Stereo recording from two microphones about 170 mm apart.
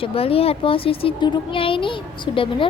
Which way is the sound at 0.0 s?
35° left (ahead or behind).